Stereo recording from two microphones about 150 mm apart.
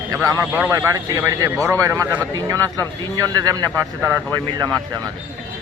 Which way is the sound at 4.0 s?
10° right (ahead or behind).